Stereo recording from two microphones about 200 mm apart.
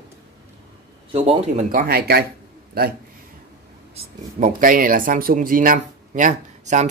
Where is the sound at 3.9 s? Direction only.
40° right (ahead or behind).